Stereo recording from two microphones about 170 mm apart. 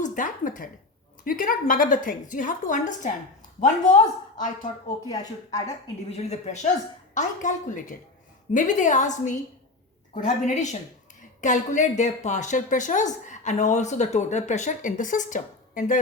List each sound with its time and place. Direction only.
0.0 s a sound: 50° left (ahead or behind)
1.2 s speech: 55° left (ahead or behind)
3.9 s speech: 5° left (ahead or behind)
4.4 s speech: 50° left (ahead or behind)
5.0 s speech: 20° left (ahead or behind)
6.1 s speech: 40° left (ahead or behind)